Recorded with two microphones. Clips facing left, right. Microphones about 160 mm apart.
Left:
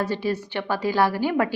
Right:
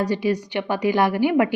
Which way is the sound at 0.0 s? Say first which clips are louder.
Right 3 dB; 15° right (ahead or behind).